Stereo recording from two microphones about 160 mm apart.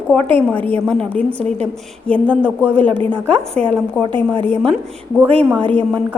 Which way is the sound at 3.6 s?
45° right (ahead or behind).